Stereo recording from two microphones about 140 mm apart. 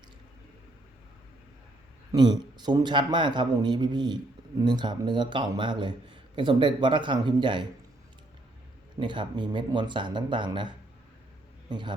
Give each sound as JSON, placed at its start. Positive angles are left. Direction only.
{"t": 2.1, "sound": "a man's voice", "side_deg": -30}
{"t": 9.0, "sound": "a man's voice", "side_deg": -35}
{"t": 11.7, "sound": "a man's voice", "side_deg": -35}